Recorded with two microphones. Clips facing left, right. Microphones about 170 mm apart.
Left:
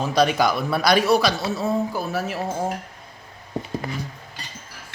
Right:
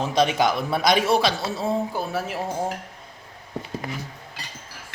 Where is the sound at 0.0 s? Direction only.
25° right (ahead or behind).